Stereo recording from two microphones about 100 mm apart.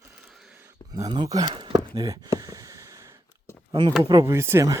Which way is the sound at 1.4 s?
60° right (ahead or behind).